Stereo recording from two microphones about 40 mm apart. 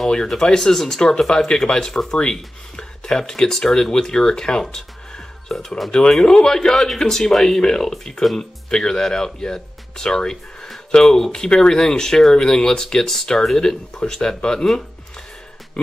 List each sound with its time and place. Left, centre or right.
0.4 s speech: centre